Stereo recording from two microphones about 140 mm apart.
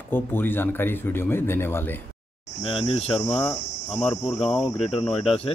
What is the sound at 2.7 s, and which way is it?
Speech, 45° left (ahead or behind).